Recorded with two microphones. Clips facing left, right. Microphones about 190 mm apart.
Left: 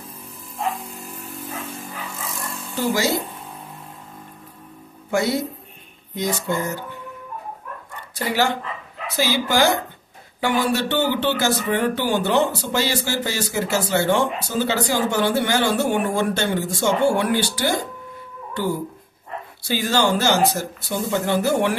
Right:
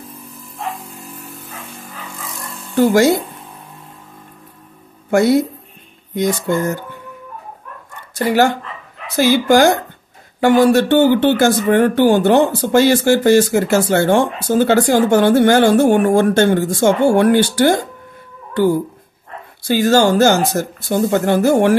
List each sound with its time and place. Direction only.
2.7 s speech: 55° right (ahead or behind)
5.1 s a woman's voice: 55° right (ahead or behind)
8.1 s speech: 50° right (ahead or behind)
19.7 s speech: 45° right (ahead or behind)